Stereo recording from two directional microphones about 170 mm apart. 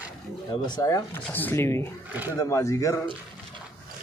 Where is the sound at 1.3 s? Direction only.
10° left (ahead or behind).